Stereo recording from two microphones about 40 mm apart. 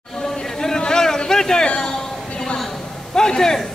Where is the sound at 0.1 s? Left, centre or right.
Centre.